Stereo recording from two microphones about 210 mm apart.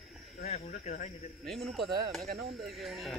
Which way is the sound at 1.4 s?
Centre (ahead or behind).